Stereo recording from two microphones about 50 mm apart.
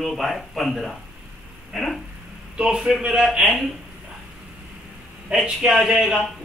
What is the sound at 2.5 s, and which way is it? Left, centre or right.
Speech, centre.